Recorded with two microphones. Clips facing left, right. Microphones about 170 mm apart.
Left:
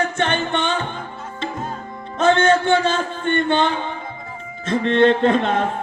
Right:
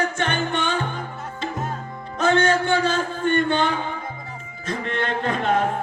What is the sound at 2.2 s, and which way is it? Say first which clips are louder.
Speech: left 3 dB; 25° left (ahead or behind).